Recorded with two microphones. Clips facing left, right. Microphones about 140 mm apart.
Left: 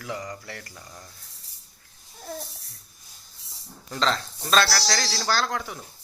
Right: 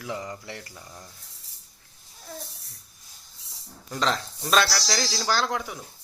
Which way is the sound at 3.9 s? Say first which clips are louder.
Left 1 dB; 10° right (ahead or behind).